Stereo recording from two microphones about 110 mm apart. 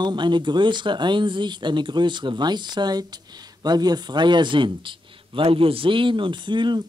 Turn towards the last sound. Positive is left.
turn(degrees=-45)  # may be behind; listen again after turning